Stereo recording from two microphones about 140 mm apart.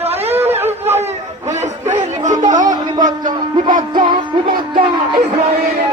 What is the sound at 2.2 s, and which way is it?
Chatter, 60° right (ahead or behind).